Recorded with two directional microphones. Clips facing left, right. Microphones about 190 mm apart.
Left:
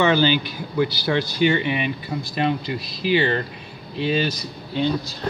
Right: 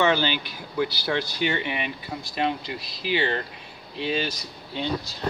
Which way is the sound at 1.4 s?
15° left (ahead or behind).